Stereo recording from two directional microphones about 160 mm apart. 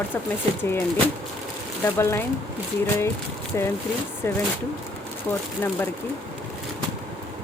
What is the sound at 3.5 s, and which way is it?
Speech, 15° left (ahead or behind).